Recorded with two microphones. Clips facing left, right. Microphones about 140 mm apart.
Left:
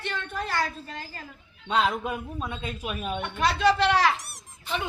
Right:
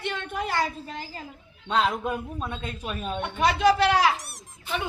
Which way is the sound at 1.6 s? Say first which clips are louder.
Right 1 dB; centre (ahead or behind).